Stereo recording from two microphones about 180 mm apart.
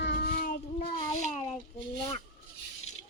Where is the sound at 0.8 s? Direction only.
35° left (ahead or behind).